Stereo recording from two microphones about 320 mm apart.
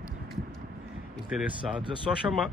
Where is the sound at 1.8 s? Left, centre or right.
Centre.